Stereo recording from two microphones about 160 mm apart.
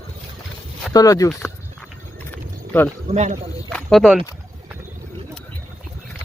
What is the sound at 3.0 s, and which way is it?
Speech, 45° right (ahead or behind).